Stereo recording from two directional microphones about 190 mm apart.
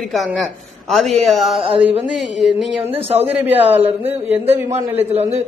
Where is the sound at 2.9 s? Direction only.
30° right (ahead or behind).